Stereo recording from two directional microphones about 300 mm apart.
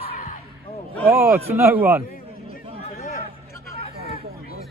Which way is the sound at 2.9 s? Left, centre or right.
Left.